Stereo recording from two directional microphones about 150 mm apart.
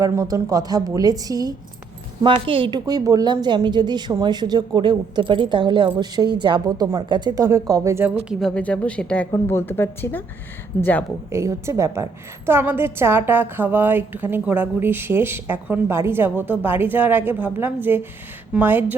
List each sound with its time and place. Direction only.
0.0 s a woman's voice: 20° right (ahead or behind)
8.3 s speech: centre (ahead or behind)
11.3 s a woman's voice: 20° right (ahead or behind)